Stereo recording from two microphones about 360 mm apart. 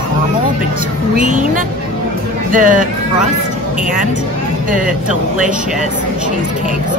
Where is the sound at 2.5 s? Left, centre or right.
Right.